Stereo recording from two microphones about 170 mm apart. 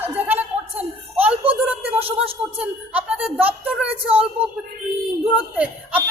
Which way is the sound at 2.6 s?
5° right (ahead or behind).